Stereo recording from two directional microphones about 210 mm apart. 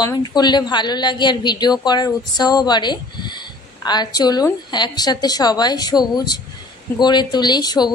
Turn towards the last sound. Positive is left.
turn(degrees=20)  # may be behind; listen again after turning